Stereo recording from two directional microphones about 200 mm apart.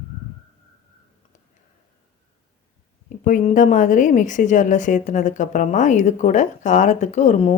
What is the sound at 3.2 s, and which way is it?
A woman's voice, 40° left (ahead or behind).